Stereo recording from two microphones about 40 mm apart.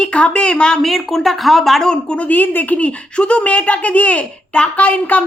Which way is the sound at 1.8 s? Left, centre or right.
Centre.